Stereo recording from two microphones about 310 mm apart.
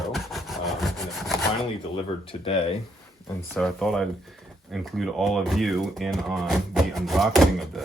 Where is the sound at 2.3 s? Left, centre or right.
Centre.